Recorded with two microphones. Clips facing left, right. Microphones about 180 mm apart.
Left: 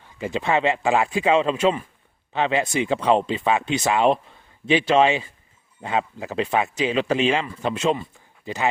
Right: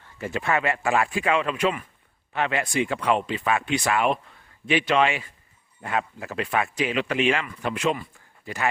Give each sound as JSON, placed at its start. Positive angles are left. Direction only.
{"t": 0.0, "sound": "speech", "side_deg": 15}